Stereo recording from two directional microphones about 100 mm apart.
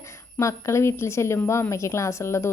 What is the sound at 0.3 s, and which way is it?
Speech, 30° left (ahead or behind).